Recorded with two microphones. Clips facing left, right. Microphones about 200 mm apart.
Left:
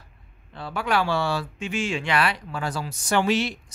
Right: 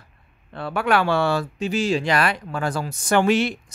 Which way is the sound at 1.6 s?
35° right (ahead or behind).